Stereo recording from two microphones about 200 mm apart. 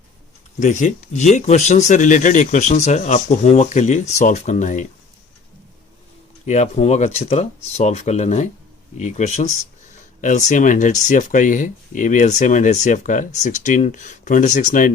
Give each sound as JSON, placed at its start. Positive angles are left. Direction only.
{"t": 0.6, "sound": "speech", "side_deg": 40}
{"t": 6.4, "sound": "speech", "side_deg": 35}